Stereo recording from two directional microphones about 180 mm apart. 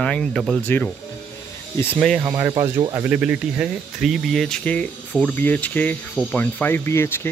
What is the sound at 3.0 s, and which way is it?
Speech, 5° right (ahead or behind).